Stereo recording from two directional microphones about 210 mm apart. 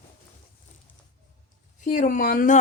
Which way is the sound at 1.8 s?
35° left (ahead or behind).